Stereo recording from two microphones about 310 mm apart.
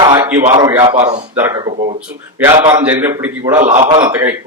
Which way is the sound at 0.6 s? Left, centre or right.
Centre.